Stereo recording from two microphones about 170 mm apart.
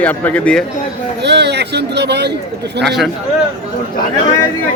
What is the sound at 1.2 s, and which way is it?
Speech, 85° right.